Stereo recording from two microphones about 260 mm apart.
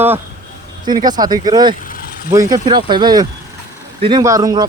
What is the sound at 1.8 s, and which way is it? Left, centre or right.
Vehicle, left.